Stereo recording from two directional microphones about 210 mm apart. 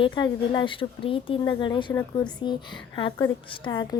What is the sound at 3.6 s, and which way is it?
Speech, 20° left (ahead or behind).